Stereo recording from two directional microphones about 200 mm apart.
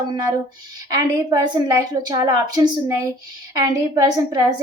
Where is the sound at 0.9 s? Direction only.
20° right (ahead or behind).